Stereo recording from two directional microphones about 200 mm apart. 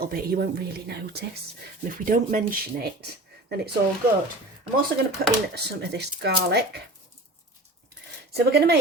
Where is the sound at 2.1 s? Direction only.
45° right (ahead or behind).